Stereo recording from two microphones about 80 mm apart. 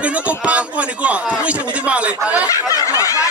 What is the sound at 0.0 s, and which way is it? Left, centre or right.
Speech, centre.